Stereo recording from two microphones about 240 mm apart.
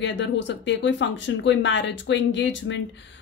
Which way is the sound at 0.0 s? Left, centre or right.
Left.